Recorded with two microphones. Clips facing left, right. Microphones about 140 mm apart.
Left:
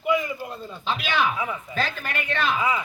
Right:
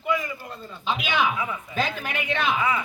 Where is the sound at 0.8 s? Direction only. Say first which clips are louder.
Even; 15° right (ahead or behind).